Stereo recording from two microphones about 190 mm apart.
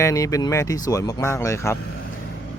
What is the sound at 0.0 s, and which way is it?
Speech, 15° left (ahead or behind).